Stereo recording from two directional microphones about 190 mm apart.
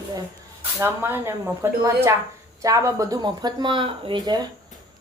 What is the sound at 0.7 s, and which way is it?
Speech, 10° right (ahead or behind).